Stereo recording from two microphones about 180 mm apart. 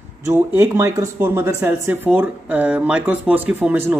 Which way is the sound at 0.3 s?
15° right (ahead or behind).